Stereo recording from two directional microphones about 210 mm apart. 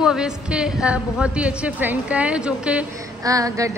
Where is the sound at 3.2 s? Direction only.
15° right (ahead or behind).